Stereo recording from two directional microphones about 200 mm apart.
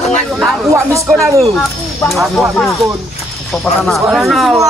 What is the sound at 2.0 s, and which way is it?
Speech, centre (ahead or behind).